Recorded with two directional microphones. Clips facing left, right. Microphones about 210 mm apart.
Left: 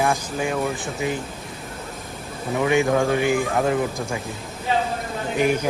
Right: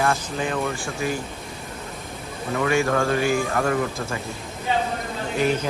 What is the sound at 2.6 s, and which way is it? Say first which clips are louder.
A man's voice: left 2 dB; 15° left (ahead or behind).